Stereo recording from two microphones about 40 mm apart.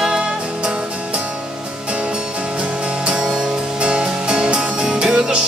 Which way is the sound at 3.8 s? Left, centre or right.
Right.